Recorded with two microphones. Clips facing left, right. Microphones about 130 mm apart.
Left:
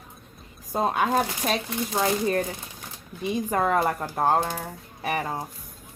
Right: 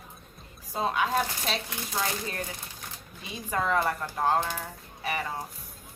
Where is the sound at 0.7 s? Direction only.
50° left (ahead or behind).